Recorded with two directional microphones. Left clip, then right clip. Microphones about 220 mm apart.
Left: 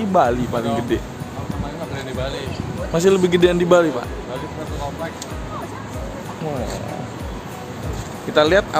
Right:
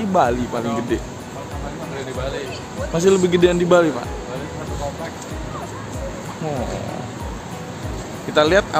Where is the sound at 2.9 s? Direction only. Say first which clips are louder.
Even; 10° left (ahead or behind).